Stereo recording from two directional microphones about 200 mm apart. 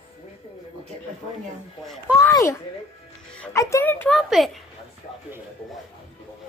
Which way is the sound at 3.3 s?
5° left (ahead or behind).